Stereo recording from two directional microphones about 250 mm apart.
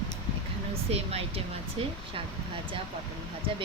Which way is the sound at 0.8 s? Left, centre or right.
Right.